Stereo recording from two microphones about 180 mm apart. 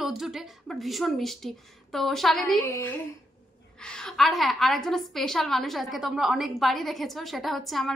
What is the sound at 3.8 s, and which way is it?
A woman's voice, 5° left (ahead or behind).